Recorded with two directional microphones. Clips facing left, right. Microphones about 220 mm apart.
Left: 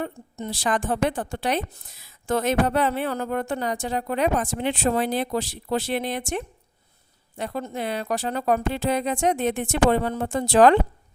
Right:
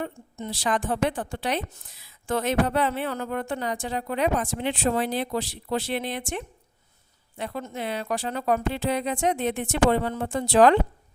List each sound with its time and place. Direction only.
0.0 s a woman's voice: 45° left (ahead or behind)